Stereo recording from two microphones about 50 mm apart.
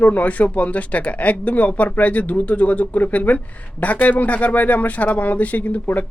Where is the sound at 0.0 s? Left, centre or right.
Left.